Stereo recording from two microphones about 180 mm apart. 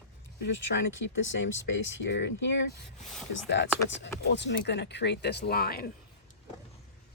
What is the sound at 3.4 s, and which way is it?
Speech, 80° left.